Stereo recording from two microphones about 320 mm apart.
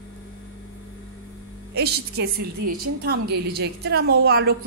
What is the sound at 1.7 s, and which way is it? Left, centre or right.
A woman's voice, right.